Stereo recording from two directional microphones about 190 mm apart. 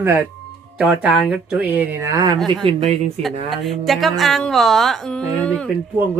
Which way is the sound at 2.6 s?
35° right (ahead or behind).